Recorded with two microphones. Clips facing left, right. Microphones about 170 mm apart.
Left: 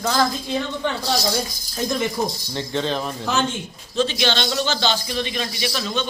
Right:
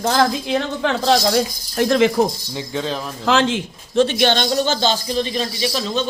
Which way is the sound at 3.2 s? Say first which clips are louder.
Right 8 dB; 90° right.